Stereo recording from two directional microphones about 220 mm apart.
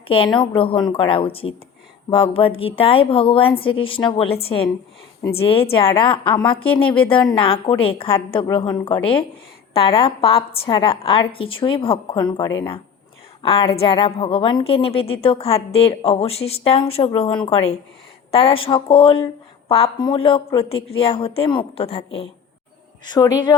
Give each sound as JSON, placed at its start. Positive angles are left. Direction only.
{"t": 0.1, "sound": "a woman's voice", "side_deg": 25}
{"t": 5.4, "sound": "a woman's voice", "side_deg": 25}
{"t": 6.7, "sound": "a woman's voice", "side_deg": 5}
{"t": 7.1, "sound": "a woman's voice", "side_deg": 20}
{"t": 23.0, "sound": "a woman's voice", "side_deg": 20}